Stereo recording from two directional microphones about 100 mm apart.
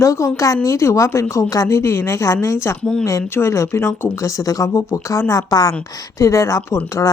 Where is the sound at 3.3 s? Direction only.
25° left (ahead or behind).